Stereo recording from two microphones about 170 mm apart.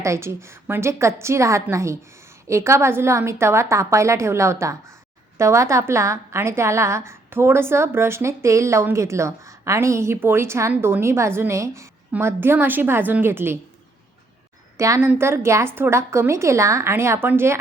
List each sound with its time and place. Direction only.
0.0 s a woman's voice: 15° right (ahead or behind)
14.8 s a woman's voice: 15° right (ahead or behind)